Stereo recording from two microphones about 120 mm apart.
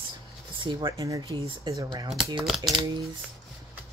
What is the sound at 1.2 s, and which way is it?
Speech, 45° right (ahead or behind).